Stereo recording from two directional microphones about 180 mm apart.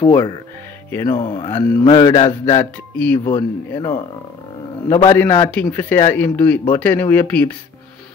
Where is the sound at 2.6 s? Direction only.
10° left (ahead or behind).